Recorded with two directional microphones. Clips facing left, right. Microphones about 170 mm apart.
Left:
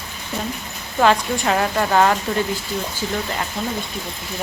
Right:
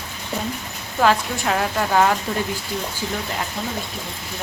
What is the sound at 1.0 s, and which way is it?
A woman's voice, centre (ahead or behind).